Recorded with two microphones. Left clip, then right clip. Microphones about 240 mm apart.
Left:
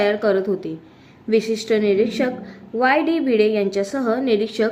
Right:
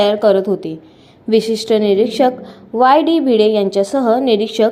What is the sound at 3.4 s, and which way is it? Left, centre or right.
A woman's voice, centre.